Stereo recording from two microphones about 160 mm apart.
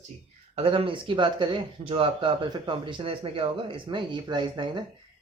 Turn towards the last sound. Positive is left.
turn(degrees=-30)  # may be behind; listen again after turning